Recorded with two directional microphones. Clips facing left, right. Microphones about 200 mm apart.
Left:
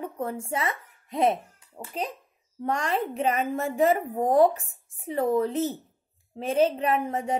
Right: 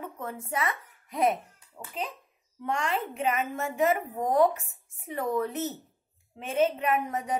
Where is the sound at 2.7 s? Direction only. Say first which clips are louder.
Left 3 dB; 40° left (ahead or behind).